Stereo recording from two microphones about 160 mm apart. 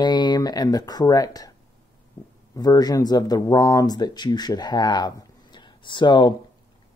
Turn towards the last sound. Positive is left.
turn(degrees=30)  # may be behind; listen again after turning